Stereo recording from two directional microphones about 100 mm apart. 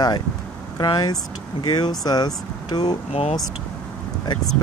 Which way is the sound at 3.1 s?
90° left.